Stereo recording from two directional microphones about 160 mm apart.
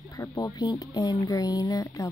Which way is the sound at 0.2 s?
20° left (ahead or behind).